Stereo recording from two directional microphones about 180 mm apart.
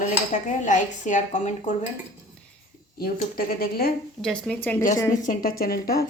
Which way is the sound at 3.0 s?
55° left (ahead or behind).